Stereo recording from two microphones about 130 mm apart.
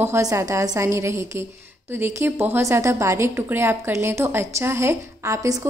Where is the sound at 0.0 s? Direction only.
25° right (ahead or behind).